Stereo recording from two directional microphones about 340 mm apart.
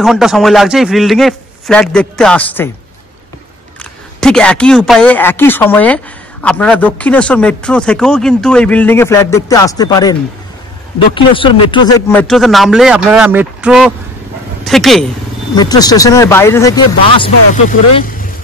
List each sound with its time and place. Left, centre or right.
0.0 s speech: centre
4.2 s speech: centre
11.1 s speech: centre
15.5 s speech: centre
17.6 s speech: left